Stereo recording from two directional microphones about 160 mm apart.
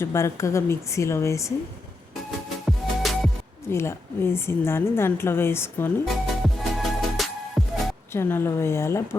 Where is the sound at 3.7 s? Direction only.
15° left (ahead or behind).